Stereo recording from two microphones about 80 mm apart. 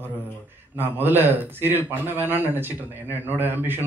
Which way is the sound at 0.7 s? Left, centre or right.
Right.